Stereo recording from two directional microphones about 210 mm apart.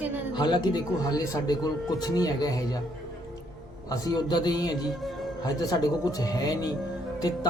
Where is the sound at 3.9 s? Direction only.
20° left (ahead or behind).